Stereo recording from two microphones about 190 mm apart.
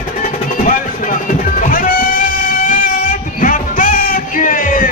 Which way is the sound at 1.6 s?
45° left (ahead or behind).